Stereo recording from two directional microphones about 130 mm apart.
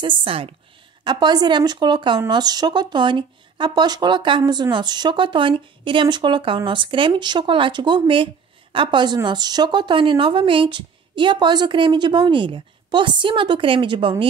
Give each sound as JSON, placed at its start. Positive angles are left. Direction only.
{"t": 0.0, "sound": "a woman's voice", "side_deg": -40}
{"t": 1.0, "sound": "speech", "side_deg": -35}